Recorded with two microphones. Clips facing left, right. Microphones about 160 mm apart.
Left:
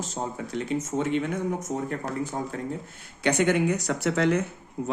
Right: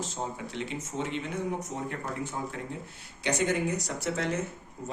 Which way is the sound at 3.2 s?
65° left (ahead or behind).